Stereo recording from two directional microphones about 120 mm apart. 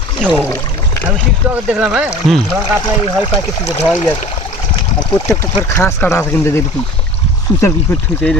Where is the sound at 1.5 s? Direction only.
10° right (ahead or behind).